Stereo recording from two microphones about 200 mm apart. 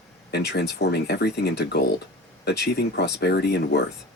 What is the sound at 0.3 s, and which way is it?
Speech, 55° left (ahead or behind).